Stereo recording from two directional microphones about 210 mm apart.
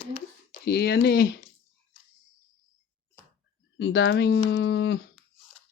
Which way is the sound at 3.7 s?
60° left (ahead or behind).